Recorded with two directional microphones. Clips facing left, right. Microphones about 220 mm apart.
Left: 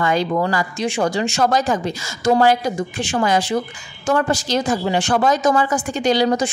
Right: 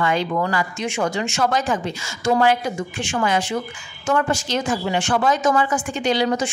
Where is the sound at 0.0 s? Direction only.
35° left (ahead or behind).